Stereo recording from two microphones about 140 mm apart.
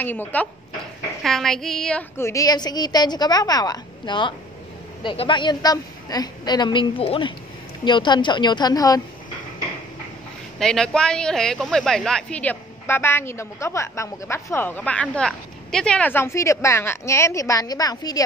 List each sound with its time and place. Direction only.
0.0 s speech: 15° left (ahead or behind)
1.2 s speech: centre (ahead or behind)
2.1 s a woman's voice: 20° left (ahead or behind)
10.6 s speech: 5° left (ahead or behind); by 18.2 s 25° left (ahead or behind)